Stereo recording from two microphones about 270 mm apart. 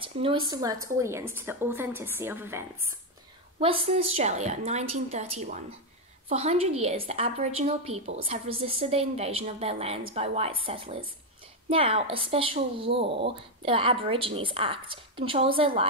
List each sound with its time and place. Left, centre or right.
0.0 s a woman's voice: centre
3.5 s a woman's voice: right